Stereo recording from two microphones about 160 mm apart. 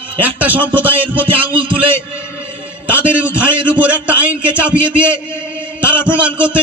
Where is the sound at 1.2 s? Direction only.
35° right (ahead or behind).